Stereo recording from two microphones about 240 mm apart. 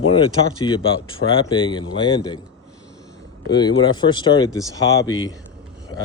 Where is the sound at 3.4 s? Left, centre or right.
Centre.